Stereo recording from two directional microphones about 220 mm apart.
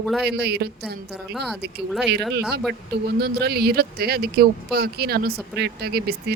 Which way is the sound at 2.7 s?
45° right (ahead or behind).